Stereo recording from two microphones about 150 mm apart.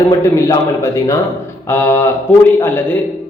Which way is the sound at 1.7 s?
15° left (ahead or behind).